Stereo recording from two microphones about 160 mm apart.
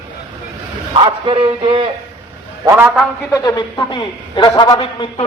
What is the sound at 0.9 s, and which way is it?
Speech, 30° right (ahead or behind).